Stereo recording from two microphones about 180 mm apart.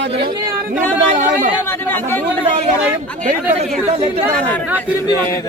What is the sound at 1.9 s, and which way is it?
Speech, 10° left (ahead or behind).